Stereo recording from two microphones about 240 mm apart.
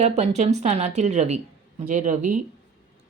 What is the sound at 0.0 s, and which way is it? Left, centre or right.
A woman's voice, right.